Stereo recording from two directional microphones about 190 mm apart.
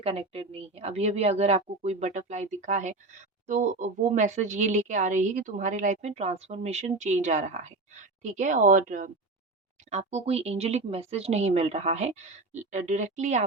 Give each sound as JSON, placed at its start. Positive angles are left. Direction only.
{"t": 0.0, "sound": "a woman's voice", "side_deg": -30}